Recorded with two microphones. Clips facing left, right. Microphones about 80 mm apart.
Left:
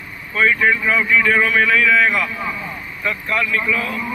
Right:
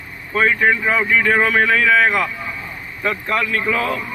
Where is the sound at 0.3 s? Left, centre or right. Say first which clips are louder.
Even; right.